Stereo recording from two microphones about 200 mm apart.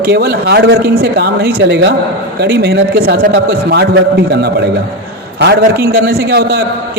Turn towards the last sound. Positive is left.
turn(degrees=-55)  # may be behind; listen again after turning